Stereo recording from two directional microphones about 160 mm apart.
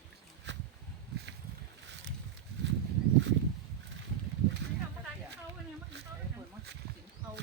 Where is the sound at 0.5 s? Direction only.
90° right.